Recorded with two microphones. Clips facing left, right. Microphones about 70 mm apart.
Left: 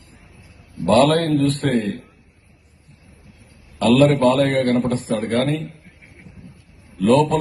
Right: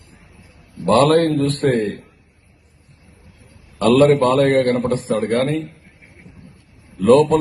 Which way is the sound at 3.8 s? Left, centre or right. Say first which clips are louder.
Right 2 dB; right.